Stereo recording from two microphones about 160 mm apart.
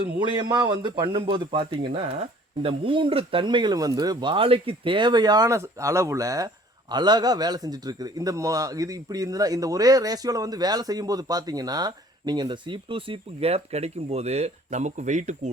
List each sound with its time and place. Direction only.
0.2 s a man's voice: 30° right (ahead or behind); by 15.4 s 50° right (ahead or behind)